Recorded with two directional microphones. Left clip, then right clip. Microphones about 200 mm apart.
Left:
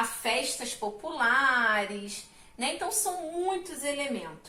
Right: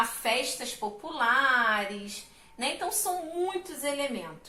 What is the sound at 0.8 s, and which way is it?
Speech, 10° left (ahead or behind).